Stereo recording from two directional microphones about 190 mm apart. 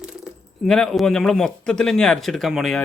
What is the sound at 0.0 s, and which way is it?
Speech, centre (ahead or behind).